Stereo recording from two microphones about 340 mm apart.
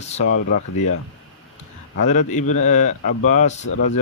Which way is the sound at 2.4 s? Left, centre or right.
Left.